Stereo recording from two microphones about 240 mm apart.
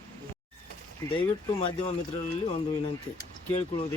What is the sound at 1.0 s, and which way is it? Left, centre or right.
Speech, centre.